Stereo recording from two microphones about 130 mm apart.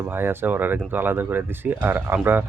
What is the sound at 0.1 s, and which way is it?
Speech, 15° right (ahead or behind).